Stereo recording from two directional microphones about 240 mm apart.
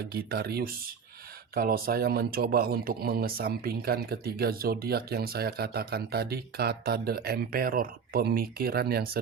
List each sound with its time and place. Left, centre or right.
0.1 s speech: right